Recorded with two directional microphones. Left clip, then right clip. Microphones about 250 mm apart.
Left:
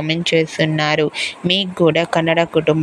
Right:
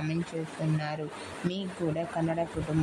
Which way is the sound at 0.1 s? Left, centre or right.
Left.